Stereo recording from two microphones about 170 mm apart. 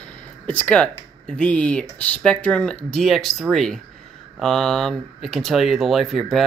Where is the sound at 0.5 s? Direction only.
10° left (ahead or behind).